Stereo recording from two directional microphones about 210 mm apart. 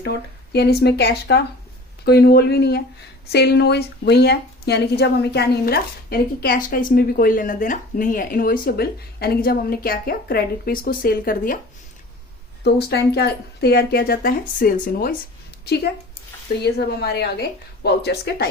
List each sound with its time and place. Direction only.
0.0 s a woman's voice: 50° left (ahead or behind)
12.6 s a woman's voice: 50° left (ahead or behind)